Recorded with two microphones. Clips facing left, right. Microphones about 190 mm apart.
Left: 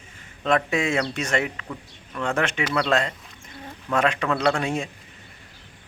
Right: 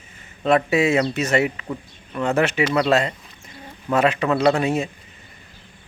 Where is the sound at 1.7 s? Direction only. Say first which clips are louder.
Right 6 dB; 15° right (ahead or behind).